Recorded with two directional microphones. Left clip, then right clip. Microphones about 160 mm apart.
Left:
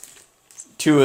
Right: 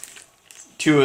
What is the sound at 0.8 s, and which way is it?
Speech, 85° left.